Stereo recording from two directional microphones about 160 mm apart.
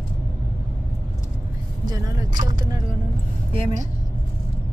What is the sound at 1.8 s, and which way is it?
Speech, 25° right (ahead or behind).